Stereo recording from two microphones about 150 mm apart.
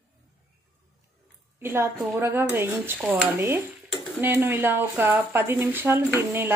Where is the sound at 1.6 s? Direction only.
15° right (ahead or behind).